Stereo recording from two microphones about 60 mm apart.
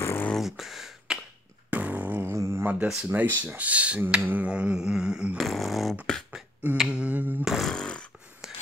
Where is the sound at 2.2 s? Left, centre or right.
Right.